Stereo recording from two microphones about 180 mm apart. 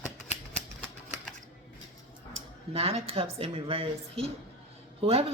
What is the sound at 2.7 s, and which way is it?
Speech, 35° right (ahead or behind).